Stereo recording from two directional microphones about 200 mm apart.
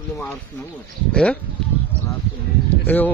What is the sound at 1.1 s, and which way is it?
Speech, 5° left (ahead or behind).